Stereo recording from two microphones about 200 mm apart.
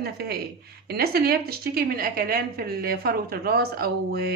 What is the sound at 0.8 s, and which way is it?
A woman's voice, 50° right (ahead or behind).